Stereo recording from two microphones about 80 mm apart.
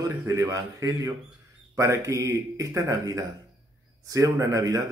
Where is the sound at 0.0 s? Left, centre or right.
Right.